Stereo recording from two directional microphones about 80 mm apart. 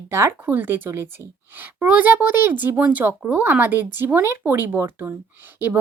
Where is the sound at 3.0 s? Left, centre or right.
Right.